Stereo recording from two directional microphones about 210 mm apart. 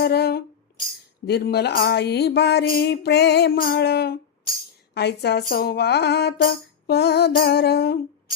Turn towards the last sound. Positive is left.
turn(degrees=50)  # may be behind; listen again after turning